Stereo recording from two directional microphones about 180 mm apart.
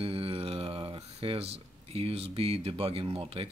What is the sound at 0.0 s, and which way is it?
Speech, 30° right (ahead or behind).